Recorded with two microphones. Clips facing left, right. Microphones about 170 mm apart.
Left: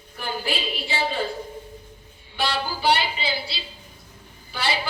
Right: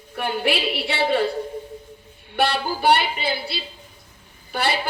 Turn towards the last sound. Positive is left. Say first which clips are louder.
# right 4 dB
turn(degrees=-55)  # may be behind; listen again after turning